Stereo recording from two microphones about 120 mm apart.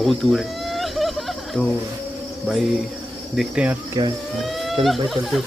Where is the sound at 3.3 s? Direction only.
10° right (ahead or behind).